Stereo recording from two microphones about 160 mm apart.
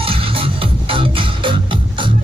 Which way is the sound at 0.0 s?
35° right (ahead or behind).